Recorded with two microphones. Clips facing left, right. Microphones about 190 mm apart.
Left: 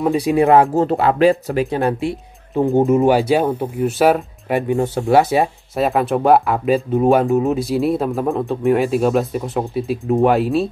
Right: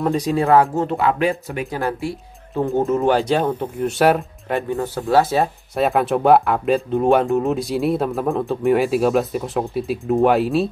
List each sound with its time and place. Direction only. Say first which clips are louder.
0.0 s speech: left 4 dB; 10° left (ahead or behind)
0.7 s speech: left 4 dB; 35° left (ahead or behind)
1.8 s speech: left 4 dB; 20° left (ahead or behind); by 4.6 s 5° left (ahead or behind)
4.6 s speech: left 5 dB; 20° left (ahead or behind)
5.8 s speech: left 1 dB; centre (ahead or behind)